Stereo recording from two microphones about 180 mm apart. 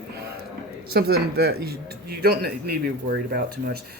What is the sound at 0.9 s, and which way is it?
Speech, 60° right (ahead or behind).